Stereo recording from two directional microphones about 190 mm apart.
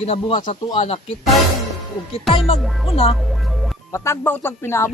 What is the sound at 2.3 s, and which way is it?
Speech, 30° left (ahead or behind).